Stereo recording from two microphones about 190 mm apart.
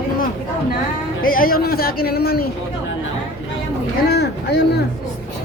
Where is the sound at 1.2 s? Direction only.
50° left (ahead or behind).